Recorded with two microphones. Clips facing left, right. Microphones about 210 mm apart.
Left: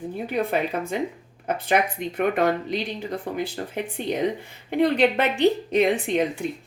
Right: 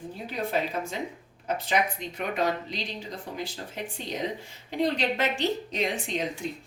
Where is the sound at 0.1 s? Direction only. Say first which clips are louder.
Left 5 dB; 60° left (ahead or behind).